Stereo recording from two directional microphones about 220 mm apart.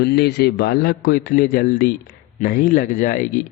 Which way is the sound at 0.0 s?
45° left (ahead or behind).